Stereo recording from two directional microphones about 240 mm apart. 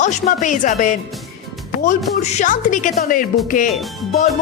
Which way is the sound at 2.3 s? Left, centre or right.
Left.